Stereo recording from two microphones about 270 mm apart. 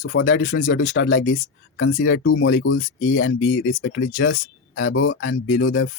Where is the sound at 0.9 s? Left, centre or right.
Left.